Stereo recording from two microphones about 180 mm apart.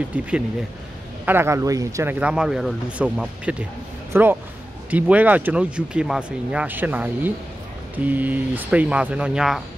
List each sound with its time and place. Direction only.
0.1 s speech: 10° right (ahead or behind)